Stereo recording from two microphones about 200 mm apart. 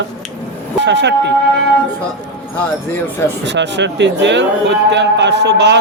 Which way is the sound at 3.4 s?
60° right (ahead or behind).